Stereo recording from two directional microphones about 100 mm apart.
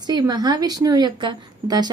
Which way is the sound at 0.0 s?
40° right (ahead or behind).